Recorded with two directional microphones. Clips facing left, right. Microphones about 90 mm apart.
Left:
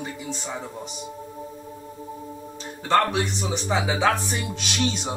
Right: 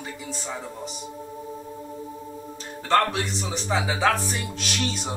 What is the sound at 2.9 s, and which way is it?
A man's voice, 5° left (ahead or behind).